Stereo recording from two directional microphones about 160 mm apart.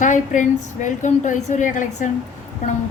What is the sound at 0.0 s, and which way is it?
A woman's voice, 50° left (ahead or behind).